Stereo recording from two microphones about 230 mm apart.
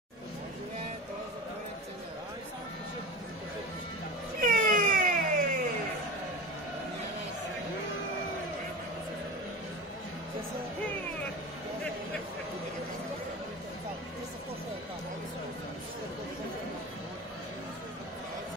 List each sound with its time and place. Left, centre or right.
4.4 s wail: right